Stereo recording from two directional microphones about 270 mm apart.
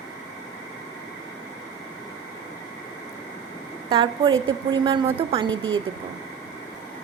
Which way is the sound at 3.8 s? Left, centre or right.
Centre.